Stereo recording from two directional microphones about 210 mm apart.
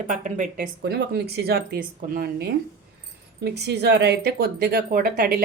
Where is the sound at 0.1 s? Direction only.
35° right (ahead or behind).